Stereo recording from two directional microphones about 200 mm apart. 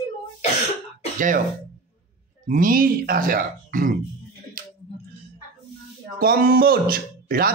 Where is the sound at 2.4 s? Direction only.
40° right (ahead or behind).